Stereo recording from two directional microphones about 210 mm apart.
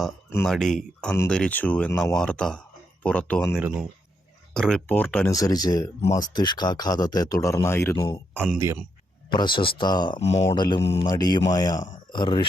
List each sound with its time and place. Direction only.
0.3 s speech: 10° left (ahead or behind)
3.6 s speech: 10° right (ahead or behind)
4.5 s speech: 5° left (ahead or behind)
8.4 s speech: 10° right (ahead or behind)
9.3 s speech: 20° left (ahead or behind)
10.2 s speech: 30° left (ahead or behind)
10.5 s speech: 20° left (ahead or behind)